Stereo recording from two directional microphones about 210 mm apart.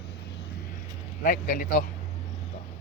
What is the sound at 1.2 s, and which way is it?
Speech, 40° left (ahead or behind).